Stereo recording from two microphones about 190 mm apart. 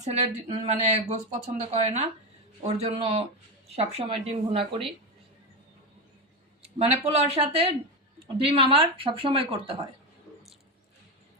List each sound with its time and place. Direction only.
0.0 s speech: 35° right (ahead or behind)
6.6 s speech: 35° right (ahead or behind)